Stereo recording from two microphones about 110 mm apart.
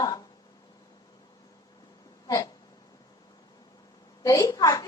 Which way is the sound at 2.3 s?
35° left (ahead or behind).